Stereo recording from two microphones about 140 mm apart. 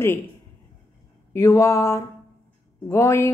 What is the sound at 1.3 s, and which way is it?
A woman's voice, 20° left (ahead or behind).